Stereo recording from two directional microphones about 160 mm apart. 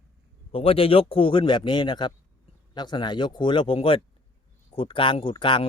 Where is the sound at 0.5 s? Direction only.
35° left (ahead or behind).